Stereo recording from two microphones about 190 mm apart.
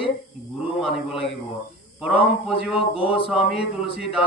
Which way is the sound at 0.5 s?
5° right (ahead or behind).